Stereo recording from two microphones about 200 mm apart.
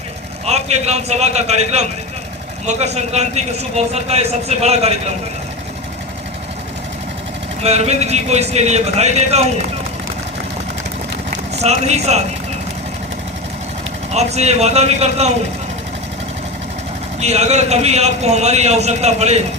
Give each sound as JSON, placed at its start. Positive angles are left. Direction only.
{"t": 0.4, "sound": "a man's voice", "side_deg": -35}
{"t": 7.6, "sound": "a man's voice", "side_deg": -30}
{"t": 11.3, "sound": "speech", "side_deg": -35}
{"t": 14.1, "sound": "a man's voice", "side_deg": -35}
{"t": 17.2, "sound": "a man's voice", "side_deg": -35}